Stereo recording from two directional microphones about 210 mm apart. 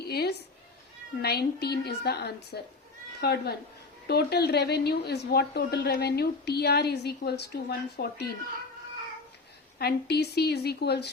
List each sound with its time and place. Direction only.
0.1 s a sound: 50° left (ahead or behind)
1.2 s a woman's voice: 50° left (ahead or behind)
9.7 s a woman's voice: 50° left (ahead or behind)